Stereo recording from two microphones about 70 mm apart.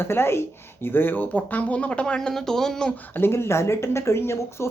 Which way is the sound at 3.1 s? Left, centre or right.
Left.